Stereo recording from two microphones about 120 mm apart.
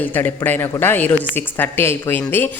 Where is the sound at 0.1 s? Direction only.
15° left (ahead or behind).